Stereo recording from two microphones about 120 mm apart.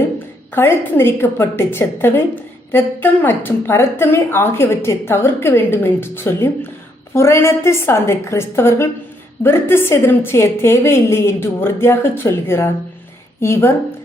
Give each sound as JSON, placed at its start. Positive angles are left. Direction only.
{"t": 0.5, "sound": "a woman's voice", "side_deg": 20}